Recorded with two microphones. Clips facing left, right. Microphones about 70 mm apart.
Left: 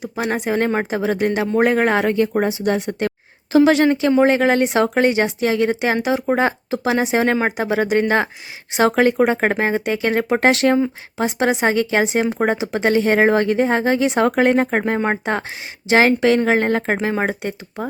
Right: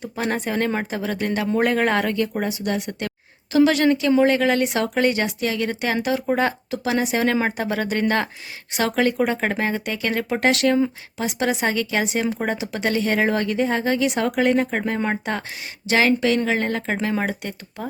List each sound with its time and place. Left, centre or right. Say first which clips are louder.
0.0 s speech: left 3 dB; centre
2.1 s speech: left 6 dB; left